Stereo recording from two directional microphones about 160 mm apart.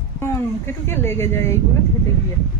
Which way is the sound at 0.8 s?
15° left (ahead or behind).